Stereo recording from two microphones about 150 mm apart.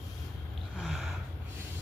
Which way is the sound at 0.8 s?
Centre (ahead or behind).